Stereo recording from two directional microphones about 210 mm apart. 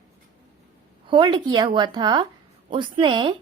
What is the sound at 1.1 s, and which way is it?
A woman's voice, 25° right (ahead or behind).